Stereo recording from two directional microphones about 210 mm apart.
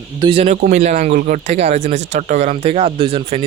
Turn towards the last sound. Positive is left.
turn(degrees=-25)  # may be behind; listen again after turning